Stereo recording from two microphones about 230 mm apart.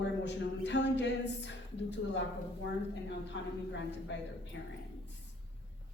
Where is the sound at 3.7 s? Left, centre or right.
Left.